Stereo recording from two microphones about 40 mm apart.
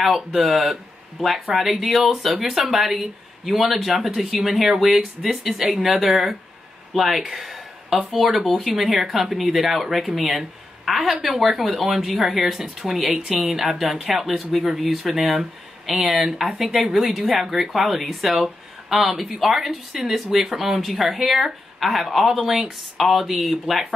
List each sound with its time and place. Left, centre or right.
0.1 s speech: centre
5.9 s speech: centre
6.9 s a sound: centre
8.1 s speech: centre
13.5 s speech: centre